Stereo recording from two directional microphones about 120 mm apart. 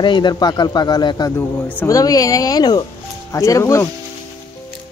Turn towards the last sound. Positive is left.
turn(degrees=25)  # may be behind; listen again after turning